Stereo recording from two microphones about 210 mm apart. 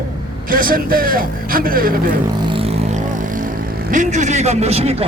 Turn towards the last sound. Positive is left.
turn(degrees=-30)  # may be behind; listen again after turning